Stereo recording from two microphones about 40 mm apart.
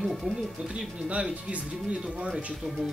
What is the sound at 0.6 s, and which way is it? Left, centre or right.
Speech, right.